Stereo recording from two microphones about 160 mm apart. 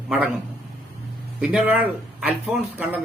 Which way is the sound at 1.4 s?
5° right (ahead or behind).